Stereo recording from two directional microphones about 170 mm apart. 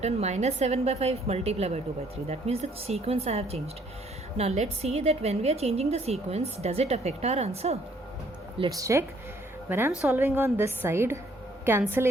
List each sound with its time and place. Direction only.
0.0 s a woman's voice: 40° right (ahead or behind)
8.7 s a woman's voice: 20° right (ahead or behind)